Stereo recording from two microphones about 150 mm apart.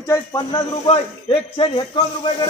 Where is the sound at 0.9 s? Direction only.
40° left (ahead or behind).